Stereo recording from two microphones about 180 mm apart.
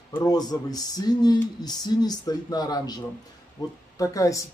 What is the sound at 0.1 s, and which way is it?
Speech, 20° left (ahead or behind).